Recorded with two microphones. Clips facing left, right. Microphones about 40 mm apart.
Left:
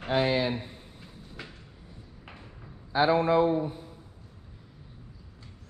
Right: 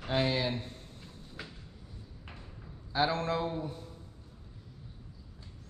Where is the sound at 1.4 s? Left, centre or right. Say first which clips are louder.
Left 2 dB; centre.